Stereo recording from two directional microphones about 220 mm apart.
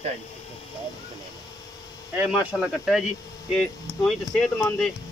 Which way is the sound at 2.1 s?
5° right (ahead or behind).